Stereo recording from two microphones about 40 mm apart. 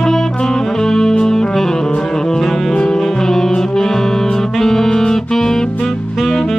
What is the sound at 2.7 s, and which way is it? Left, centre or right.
Music, centre.